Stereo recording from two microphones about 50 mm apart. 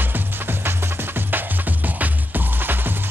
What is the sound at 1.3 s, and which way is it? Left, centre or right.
Music, right.